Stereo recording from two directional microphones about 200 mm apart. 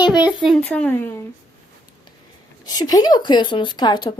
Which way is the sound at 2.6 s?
20° left (ahead or behind).